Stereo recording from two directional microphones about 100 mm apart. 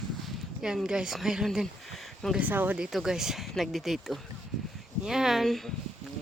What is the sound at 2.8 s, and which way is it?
Speech, 5° right (ahead or behind).